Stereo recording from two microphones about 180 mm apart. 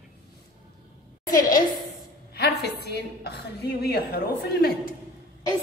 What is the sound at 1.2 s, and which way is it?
Speech, 50° left (ahead or behind).